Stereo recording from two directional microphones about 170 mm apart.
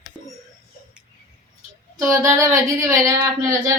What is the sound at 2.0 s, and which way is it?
Speech, 15° right (ahead or behind).